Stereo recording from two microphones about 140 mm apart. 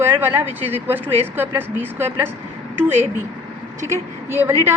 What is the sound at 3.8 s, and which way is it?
Speech, 15° right (ahead or behind).